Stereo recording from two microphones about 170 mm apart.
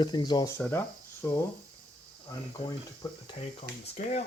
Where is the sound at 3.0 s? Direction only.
25° left (ahead or behind).